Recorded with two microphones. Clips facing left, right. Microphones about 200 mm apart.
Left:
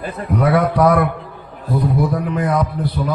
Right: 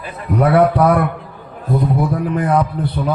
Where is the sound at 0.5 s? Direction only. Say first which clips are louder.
Right 2 dB; 30° right (ahead or behind).